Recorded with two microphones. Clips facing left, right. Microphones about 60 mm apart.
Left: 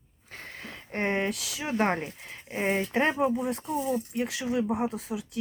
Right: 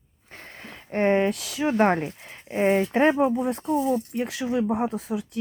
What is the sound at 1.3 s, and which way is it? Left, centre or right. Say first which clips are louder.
Speech: right 7 dB; right.